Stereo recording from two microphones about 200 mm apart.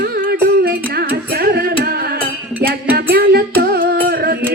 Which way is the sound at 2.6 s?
50° right (ahead or behind).